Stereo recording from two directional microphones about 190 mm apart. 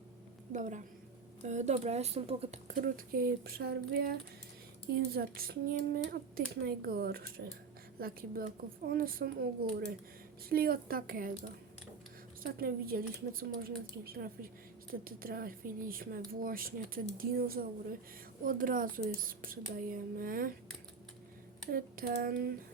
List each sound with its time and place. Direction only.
0.5 s speech: 40° right (ahead or behind)
12.4 s speech: 50° right (ahead or behind)
21.7 s speech: 50° right (ahead or behind)